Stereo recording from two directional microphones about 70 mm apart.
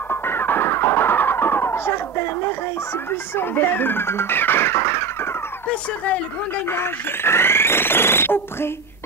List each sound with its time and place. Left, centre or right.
0.1 s music: left
5.7 s speech: centre
6.6 s speech: left